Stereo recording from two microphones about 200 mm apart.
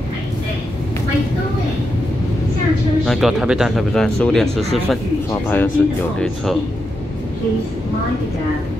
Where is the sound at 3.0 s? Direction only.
Centre (ahead or behind).